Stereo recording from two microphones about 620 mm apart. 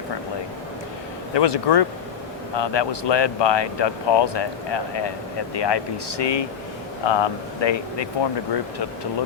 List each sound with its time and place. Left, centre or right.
1.3 s speech: left